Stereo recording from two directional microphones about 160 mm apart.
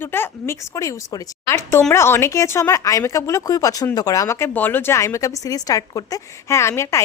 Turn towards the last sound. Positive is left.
turn(degrees=15)  # may be behind; listen again after turning